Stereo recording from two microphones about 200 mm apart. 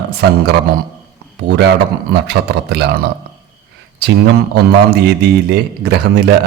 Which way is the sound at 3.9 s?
55° right (ahead or behind).